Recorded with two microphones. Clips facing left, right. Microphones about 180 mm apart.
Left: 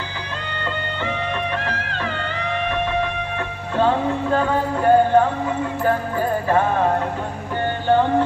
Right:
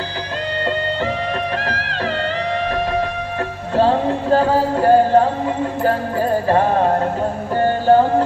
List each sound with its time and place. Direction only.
1.7 s music: 35° right (ahead or behind)
3.7 s music: 35° right (ahead or behind)